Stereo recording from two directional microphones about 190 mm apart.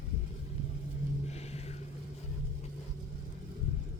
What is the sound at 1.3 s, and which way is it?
Music, 35° left (ahead or behind).